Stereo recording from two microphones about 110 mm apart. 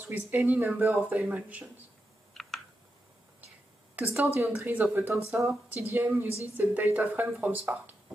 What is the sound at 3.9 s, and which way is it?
Speech, 15° right (ahead or behind).